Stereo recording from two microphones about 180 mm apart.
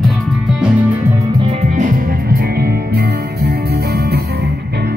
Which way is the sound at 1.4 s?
30° right (ahead or behind).